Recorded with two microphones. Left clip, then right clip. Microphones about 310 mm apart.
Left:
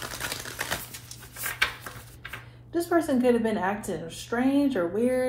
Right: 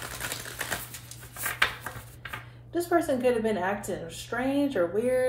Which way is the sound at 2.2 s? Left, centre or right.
Centre.